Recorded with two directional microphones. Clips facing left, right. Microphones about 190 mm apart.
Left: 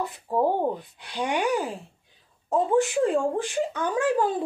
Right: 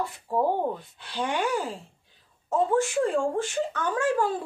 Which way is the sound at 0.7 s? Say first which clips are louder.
Left 1 dB; 15° left (ahead or behind).